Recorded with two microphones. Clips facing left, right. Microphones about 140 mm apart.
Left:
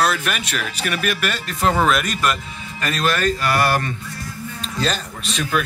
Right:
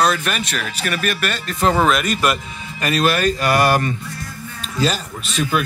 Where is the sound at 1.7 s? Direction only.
5° right (ahead or behind).